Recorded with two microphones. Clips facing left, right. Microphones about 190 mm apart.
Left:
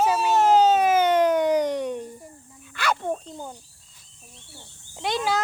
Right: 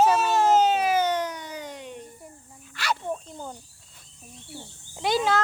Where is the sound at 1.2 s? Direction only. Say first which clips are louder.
Left 13 dB; 90° left.